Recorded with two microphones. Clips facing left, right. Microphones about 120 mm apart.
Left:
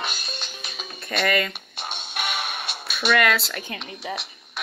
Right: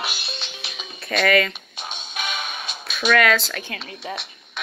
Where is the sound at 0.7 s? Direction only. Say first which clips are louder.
Right 3 dB; centre (ahead or behind).